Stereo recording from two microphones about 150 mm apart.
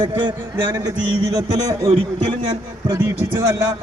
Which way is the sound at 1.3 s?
25° right (ahead or behind).